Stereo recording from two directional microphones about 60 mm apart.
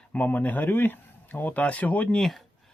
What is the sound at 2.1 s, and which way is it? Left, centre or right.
Speech, centre.